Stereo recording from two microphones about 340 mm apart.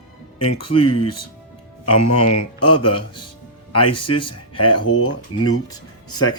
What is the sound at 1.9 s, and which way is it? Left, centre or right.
Speech, left.